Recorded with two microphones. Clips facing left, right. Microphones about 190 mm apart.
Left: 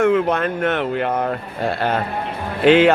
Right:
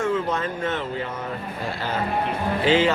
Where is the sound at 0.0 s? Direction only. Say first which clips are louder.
Left 7 dB; 65° left (ahead or behind).